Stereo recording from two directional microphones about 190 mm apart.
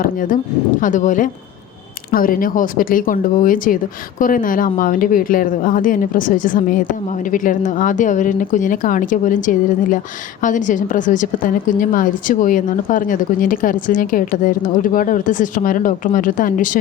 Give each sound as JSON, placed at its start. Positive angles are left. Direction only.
{"t": 0.0, "sound": "a woman's voice", "side_deg": 45}